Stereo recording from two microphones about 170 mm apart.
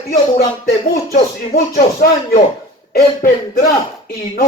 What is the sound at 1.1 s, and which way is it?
Speech, 60° left (ahead or behind).